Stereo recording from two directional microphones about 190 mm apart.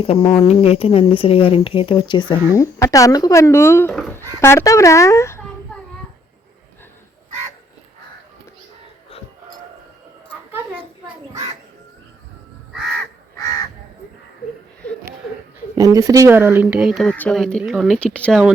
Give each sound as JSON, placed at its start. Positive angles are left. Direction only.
{"t": 0.0, "sound": "a child's voice", "side_deg": 30}
{"t": 15.7, "sound": "speech", "side_deg": -20}